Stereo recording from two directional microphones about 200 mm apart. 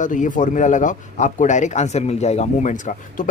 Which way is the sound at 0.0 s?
40° left (ahead or behind).